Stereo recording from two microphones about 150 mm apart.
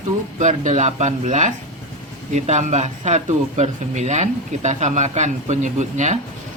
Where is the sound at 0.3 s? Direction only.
55° right (ahead or behind).